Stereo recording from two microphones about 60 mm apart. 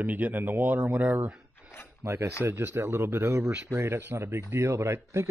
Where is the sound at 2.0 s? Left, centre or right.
Right.